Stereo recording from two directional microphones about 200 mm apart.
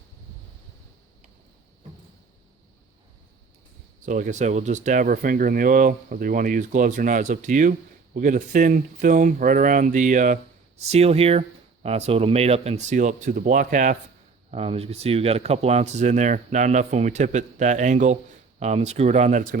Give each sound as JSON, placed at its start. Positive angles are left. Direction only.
{"t": 4.0, "sound": "speech", "side_deg": -40}
{"t": 14.5, "sound": "speech", "side_deg": -30}